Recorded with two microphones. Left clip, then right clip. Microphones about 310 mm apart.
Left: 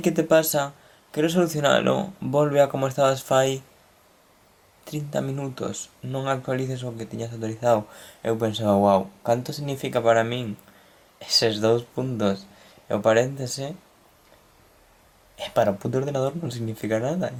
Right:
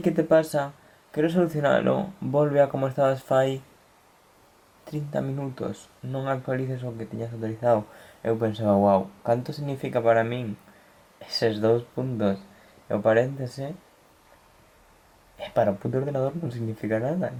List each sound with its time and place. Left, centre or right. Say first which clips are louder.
0.0 s speech: left 1 dB; centre
5.6 s speech: left 1 dB; right
6.1 s speech: left 2 dB; centre
8.6 s speech: left 1 dB; centre
9.2 s speech: left 1 dB; centre
15.4 s speech: left 2 dB; centre; by 16.5 s right
16.5 s speech: left 2 dB; centre